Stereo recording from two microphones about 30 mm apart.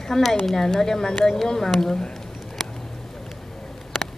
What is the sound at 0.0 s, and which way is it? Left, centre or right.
A woman's voice, centre.